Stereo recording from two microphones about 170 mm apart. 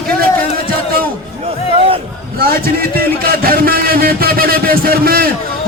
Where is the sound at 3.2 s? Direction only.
60° right (ahead or behind).